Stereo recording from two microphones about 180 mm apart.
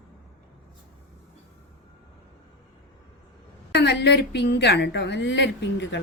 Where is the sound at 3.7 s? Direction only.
65° left (ahead or behind).